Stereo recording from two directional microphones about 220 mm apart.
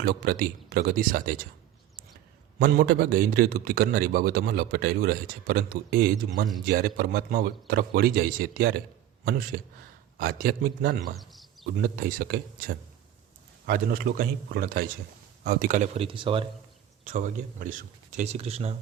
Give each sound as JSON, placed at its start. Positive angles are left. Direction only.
{"t": 0.0, "sound": "speech", "side_deg": -40}
{"t": 2.6, "sound": "a man's voice", "side_deg": -40}
{"t": 11.2, "sound": "speech", "side_deg": 0}
{"t": 11.8, "sound": "a man's voice", "side_deg": -40}
{"t": 17.0, "sound": "speech", "side_deg": -35}